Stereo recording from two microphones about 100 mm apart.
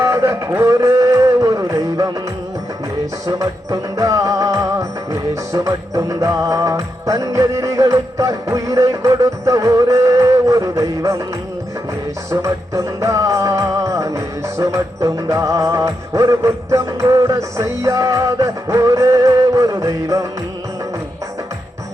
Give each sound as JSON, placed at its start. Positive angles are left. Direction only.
{"t": 0.0, "sound": "music", "side_deg": -30}
{"t": 3.2, "sound": "music", "side_deg": -35}
{"t": 12.3, "sound": "music", "side_deg": -30}